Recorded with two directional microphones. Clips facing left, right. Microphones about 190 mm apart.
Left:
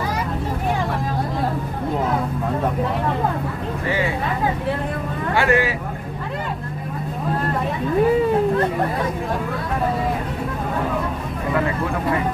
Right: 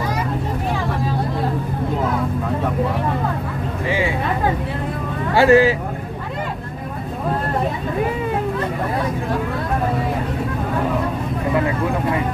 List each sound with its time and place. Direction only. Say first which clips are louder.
5.3 s speech: right 7 dB; 30° right (ahead or behind)